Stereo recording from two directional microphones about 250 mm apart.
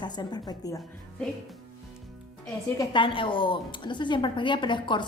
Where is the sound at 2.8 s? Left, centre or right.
Centre.